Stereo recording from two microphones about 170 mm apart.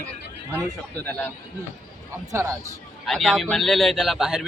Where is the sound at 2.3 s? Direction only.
15° right (ahead or behind).